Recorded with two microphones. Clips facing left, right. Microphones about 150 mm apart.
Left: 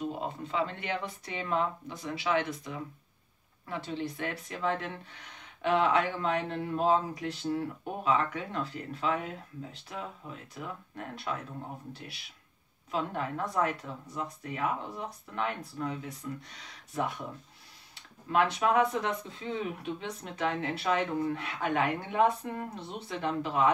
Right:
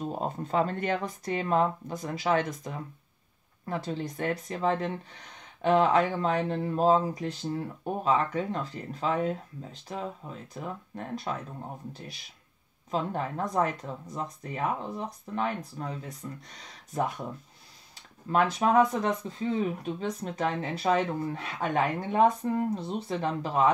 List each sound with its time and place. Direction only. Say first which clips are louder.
0.0 s speech: right 3 dB; 40° right (ahead or behind)
12.9 s speech: right 2 dB; 40° right (ahead or behind)
18.3 s speech: right 3 dB; 40° right (ahead or behind)